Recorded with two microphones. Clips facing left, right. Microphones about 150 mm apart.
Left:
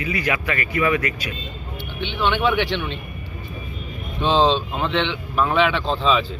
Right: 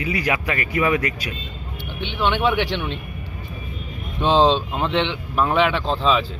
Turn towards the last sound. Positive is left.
turn(degrees=-5)  # may be behind; listen again after turning